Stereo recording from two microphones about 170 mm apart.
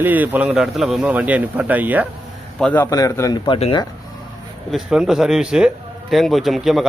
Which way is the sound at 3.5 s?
30° left (ahead or behind).